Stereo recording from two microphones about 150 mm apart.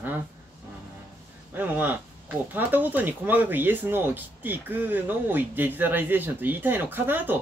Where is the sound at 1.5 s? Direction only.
10° right (ahead or behind).